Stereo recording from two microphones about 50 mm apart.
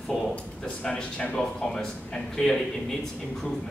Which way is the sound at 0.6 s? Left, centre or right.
Centre.